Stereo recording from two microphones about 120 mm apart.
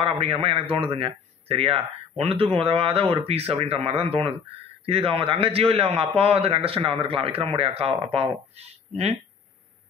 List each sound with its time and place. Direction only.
0.0 s a man's voice: 50° right (ahead or behind)